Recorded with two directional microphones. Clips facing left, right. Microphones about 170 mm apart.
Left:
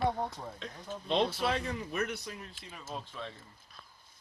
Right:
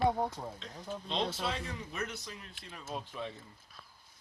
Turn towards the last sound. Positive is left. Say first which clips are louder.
# right 2 dB
turn(degrees=-15)  # may be behind; listen again after turning